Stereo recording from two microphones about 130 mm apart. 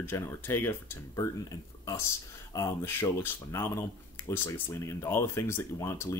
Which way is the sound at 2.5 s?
20° left (ahead or behind).